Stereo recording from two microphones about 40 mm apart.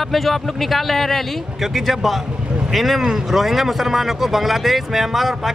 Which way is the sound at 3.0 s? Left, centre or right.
Centre.